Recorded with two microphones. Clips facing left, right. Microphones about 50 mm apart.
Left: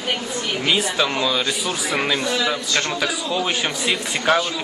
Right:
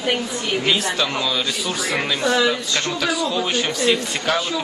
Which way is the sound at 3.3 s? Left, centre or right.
Centre.